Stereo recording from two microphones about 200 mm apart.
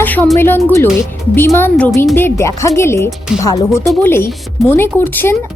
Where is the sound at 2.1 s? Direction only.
10° left (ahead or behind).